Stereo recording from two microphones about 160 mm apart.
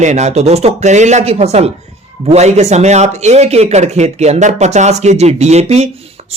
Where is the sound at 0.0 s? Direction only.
45° right (ahead or behind).